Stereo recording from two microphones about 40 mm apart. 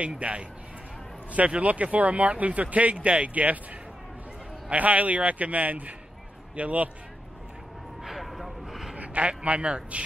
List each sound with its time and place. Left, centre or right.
0.2 s speech: right
4.6 s speech: right
8.0 s a sound: centre
8.9 s a man's voice: right